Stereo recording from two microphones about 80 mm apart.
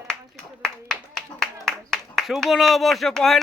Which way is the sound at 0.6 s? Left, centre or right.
Centre.